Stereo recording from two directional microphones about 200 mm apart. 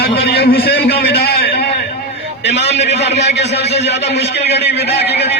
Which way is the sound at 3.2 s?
60° left (ahead or behind).